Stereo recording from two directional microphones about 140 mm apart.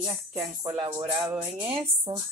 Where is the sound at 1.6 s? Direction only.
35° right (ahead or behind).